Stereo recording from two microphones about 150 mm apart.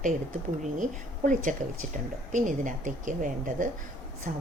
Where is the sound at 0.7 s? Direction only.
60° right (ahead or behind).